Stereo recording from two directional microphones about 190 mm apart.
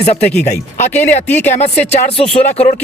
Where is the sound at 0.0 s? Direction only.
35° left (ahead or behind).